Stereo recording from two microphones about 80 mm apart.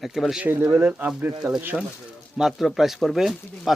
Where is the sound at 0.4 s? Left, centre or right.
Right.